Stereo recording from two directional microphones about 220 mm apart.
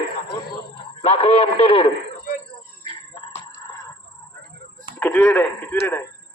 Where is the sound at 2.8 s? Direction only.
20° left (ahead or behind).